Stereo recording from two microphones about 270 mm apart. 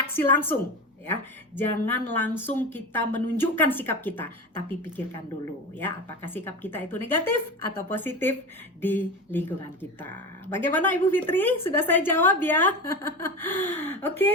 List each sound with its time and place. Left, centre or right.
0.0 s a woman's voice: centre
5.7 s a woman's voice: centre